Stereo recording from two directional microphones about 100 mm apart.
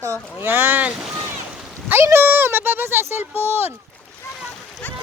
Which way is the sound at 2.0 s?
25° right (ahead or behind).